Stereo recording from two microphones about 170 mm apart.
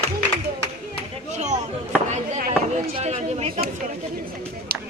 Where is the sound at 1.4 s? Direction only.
45° right (ahead or behind).